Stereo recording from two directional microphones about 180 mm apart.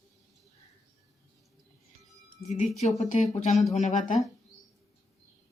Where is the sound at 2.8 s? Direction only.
40° left (ahead or behind).